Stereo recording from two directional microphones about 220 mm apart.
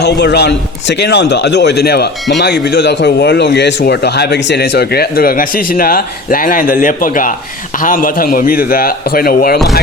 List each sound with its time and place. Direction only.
0.0 s a man's voice: 50° left (ahead or behind)